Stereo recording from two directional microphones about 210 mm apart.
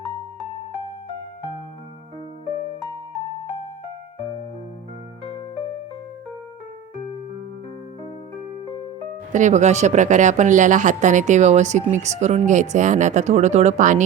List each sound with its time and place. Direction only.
9.3 s speech: 35° right (ahead or behind)